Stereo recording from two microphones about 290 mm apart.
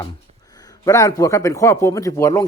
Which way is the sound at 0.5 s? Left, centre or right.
Centre.